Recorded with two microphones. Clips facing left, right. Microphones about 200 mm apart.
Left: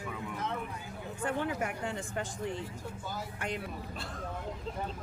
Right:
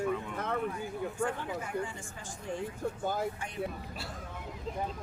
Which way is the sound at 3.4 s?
75° left (ahead or behind).